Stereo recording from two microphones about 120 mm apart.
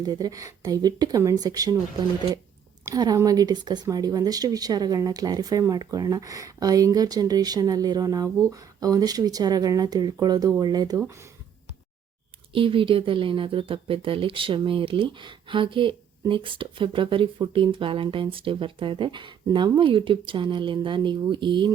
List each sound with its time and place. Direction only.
0.0 s speech: 30° right (ahead or behind)
2.8 s speech: 30° right (ahead or behind)
12.5 s speech: 45° right (ahead or behind)